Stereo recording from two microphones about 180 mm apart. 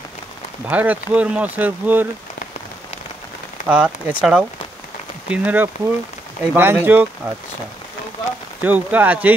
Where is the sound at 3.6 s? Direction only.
5° right (ahead or behind).